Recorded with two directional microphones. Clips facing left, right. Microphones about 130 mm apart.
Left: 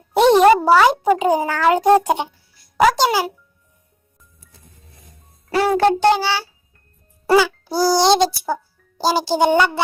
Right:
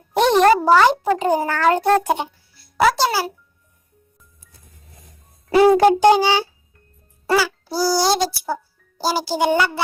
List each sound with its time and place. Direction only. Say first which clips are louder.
0.2 s a child's voice: left 3 dB; 5° left (ahead or behind)
5.5 s a child's voice: right 4 dB; 15° right (ahead or behind)
7.3 s a child's voice: left 4 dB; 20° left (ahead or behind)
8.3 s a child's voice: left 2 dB; 5° right (ahead or behind)
9.0 s speech: left 3 dB; 25° left (ahead or behind)